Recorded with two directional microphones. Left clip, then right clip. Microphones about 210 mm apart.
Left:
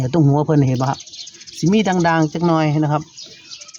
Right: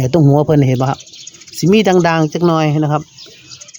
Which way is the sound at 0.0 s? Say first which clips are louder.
Right 5 dB; 15° right (ahead or behind).